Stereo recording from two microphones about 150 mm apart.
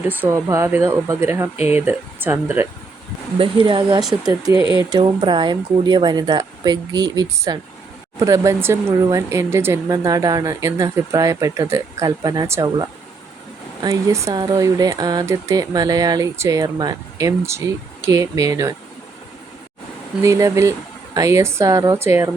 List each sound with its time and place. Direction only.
0.0 s speech: 15° right (ahead or behind)
3.3 s speech: 35° right (ahead or behind)
4.5 s speech: 35° left (ahead or behind)
4.8 s speech: 30° right (ahead or behind)
13.8 s speech: 20° right (ahead or behind)
20.2 s speech: 20° right (ahead or behind)